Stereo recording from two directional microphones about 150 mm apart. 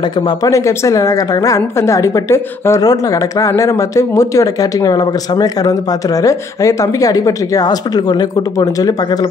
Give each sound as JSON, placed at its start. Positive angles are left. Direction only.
{"t": 0.3, "sound": "a woman's voice", "side_deg": 20}